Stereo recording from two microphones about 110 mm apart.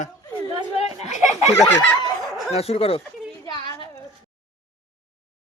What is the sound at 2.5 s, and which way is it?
Speech, 65° left (ahead or behind).